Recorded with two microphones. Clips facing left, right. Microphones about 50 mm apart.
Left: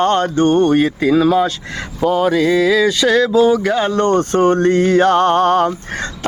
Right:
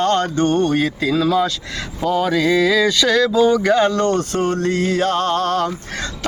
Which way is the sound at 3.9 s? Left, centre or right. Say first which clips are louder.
Left 3 dB; left.